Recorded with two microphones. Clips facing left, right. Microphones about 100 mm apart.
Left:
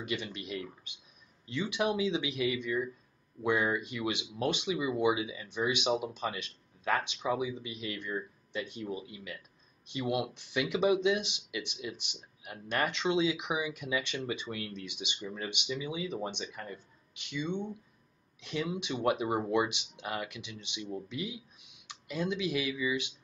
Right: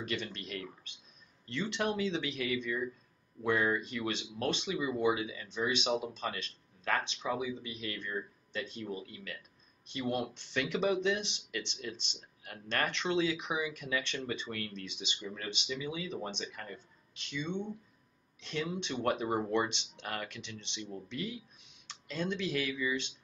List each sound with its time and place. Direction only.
0.0 s speech: 15° left (ahead or behind)